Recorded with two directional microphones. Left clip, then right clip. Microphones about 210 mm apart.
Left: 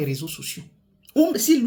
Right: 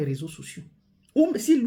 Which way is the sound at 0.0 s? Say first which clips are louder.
Left 3 dB; 15° right (ahead or behind).